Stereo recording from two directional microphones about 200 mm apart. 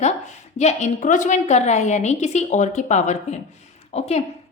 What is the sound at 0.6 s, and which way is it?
A woman's voice, 40° left (ahead or behind).